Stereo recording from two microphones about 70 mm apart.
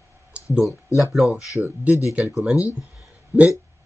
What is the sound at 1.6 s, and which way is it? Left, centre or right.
Speech, right.